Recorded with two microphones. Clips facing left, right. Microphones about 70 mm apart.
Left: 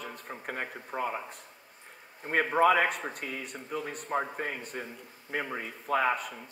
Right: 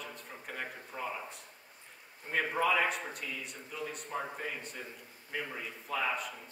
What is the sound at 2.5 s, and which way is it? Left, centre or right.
A man's voice, left.